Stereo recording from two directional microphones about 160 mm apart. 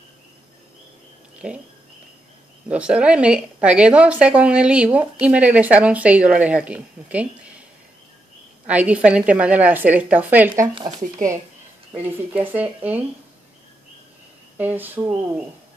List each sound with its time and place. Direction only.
2.7 s speech: 5° right (ahead or behind)
8.6 s speech: 10° right (ahead or behind)
10.5 s speech: 30° right (ahead or behind)
10.9 s speech: 55° right (ahead or behind)
11.9 s speech: 10° right (ahead or behind)
14.6 s speech: 10° right (ahead or behind)